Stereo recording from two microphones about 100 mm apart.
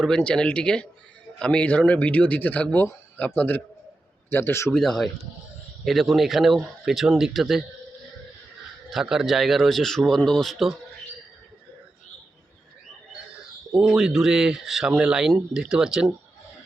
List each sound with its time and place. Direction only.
0.0 s a man's voice: 10° left (ahead or behind); by 4.7 s 25° left (ahead or behind)
4.7 s speech: 5° left (ahead or behind)
8.9 s speech: 5° right (ahead or behind)
13.3 s speech: 5° right (ahead or behind)